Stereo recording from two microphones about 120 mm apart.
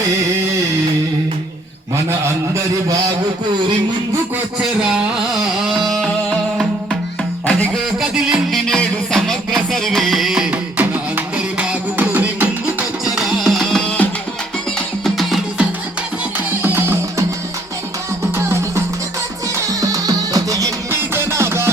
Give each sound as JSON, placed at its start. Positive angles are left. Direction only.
{"t": 5.8, "sound": "music", "side_deg": 0}
{"t": 8.1, "sound": "music", "side_deg": 0}
{"t": 13.1, "sound": "music", "side_deg": 0}
{"t": 16.6, "sound": "music", "side_deg": -20}
{"t": 18.3, "sound": "music", "side_deg": -25}